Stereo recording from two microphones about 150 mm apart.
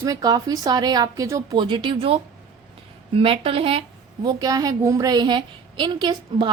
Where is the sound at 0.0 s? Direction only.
25° right (ahead or behind).